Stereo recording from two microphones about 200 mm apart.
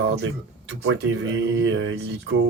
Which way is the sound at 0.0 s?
65° right (ahead or behind).